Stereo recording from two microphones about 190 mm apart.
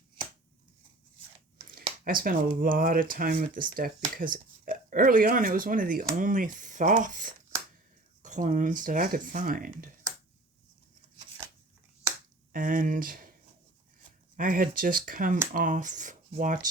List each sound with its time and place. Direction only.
2.0 s speech: 50° right (ahead or behind)
12.5 s speech: 45° right (ahead or behind)
14.3 s speech: 45° right (ahead or behind)